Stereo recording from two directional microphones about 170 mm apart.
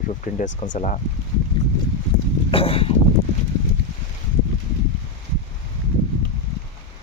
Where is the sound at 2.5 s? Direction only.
35° left (ahead or behind).